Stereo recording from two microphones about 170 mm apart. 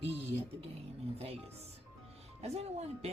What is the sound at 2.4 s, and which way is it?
Speech, 40° right (ahead or behind).